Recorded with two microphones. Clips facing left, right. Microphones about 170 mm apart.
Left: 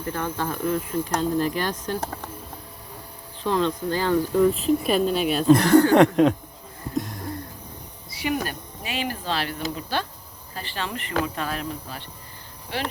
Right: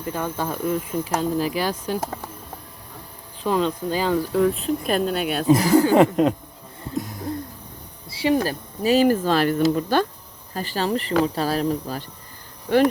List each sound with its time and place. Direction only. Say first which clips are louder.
0.0 s speech: right 1 dB; 10° right (ahead or behind)
3.4 s speech: right 1 dB; 10° right (ahead or behind)
4.4 s speech: left 1 dB; centre (ahead or behind)
6.9 s a sound: even; 5° right (ahead or behind)
8.1 s cricket: right 6 dB; 30° right (ahead or behind)
8.4 s speech: right 12 dB; 40° right (ahead or behind)